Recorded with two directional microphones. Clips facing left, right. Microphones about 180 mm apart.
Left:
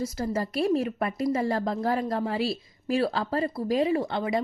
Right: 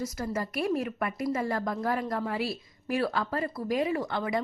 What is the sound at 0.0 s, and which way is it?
A woman's voice, 30° left (ahead or behind).